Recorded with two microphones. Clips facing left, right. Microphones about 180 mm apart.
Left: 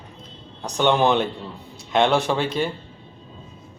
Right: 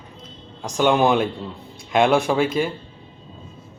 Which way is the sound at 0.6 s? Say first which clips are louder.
Right 1 dB; 10° right (ahead or behind).